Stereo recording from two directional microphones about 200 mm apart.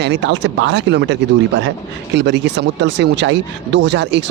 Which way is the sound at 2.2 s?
60° right (ahead or behind).